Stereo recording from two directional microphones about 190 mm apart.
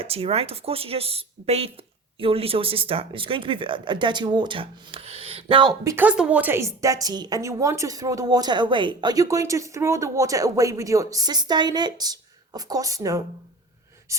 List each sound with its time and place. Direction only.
0.0 s speech: 30° right (ahead or behind); by 14.2 s 15° right (ahead or behind)